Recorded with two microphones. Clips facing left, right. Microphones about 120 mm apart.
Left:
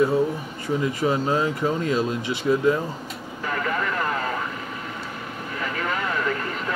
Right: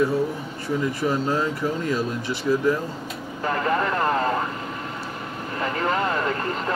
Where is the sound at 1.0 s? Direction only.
20° left (ahead or behind).